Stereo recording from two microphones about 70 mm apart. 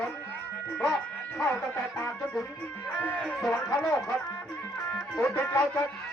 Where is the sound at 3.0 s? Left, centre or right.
Left.